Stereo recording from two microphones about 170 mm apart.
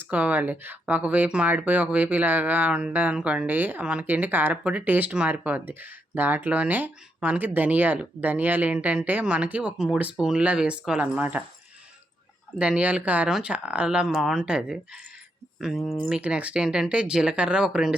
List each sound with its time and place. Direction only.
0.0 s speech: 10° right (ahead or behind)
12.5 s speech: 5° right (ahead or behind)